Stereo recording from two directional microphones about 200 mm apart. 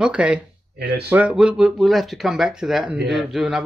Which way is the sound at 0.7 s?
50° right (ahead or behind).